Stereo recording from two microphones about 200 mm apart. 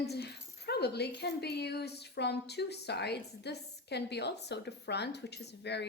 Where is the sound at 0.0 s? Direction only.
55° left (ahead or behind).